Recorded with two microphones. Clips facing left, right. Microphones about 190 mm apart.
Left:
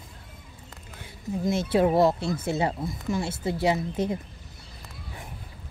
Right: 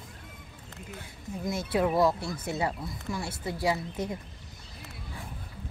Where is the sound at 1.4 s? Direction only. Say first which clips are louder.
Left 5 dB; 25° left (ahead or behind).